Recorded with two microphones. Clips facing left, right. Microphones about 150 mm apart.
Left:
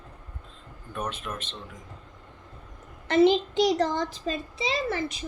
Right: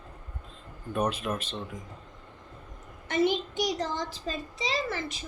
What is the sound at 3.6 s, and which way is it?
Speech, 65° left (ahead or behind).